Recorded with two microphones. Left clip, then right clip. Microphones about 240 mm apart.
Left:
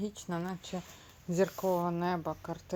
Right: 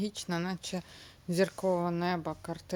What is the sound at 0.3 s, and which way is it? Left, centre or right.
Speech, right.